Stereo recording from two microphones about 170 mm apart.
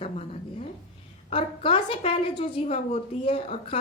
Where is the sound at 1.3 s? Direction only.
35° left (ahead or behind).